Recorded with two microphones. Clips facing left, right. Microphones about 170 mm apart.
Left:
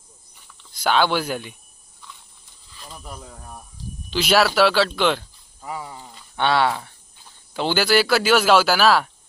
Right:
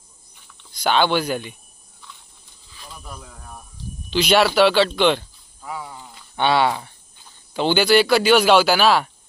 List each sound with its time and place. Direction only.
0.5 s speech: 5° left (ahead or behind)
3.1 s speech: 15° left (ahead or behind)
4.1 s speech: centre (ahead or behind)